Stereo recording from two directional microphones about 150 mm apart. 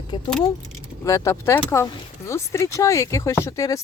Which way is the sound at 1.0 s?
20° left (ahead or behind).